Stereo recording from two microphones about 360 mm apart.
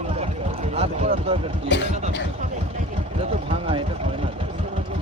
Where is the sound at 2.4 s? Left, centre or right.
Centre.